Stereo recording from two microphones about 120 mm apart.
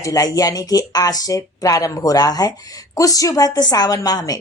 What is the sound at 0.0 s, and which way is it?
Speech, 30° left (ahead or behind).